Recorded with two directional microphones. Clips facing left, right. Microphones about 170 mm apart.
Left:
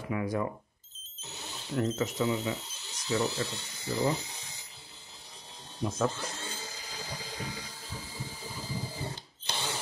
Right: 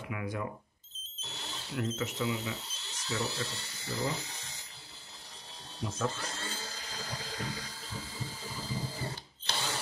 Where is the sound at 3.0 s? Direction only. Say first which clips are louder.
Left 5 dB; 15° left (ahead or behind).